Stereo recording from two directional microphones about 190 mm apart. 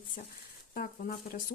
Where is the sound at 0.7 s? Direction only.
45° left (ahead or behind).